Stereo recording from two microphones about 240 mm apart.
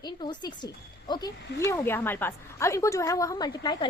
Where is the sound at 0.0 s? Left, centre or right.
Centre.